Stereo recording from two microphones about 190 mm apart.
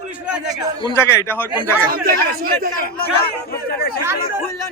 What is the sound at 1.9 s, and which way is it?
Speech, 55° right (ahead or behind).